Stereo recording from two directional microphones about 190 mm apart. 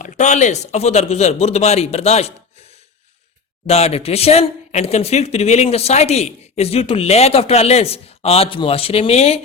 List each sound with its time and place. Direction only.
0.0 s speech: 40° left (ahead or behind)
3.7 s speech: 30° left (ahead or behind)